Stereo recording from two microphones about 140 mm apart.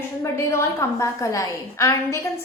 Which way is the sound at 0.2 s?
20° left (ahead or behind).